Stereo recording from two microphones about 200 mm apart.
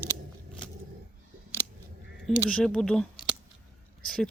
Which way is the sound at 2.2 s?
Centre (ahead or behind).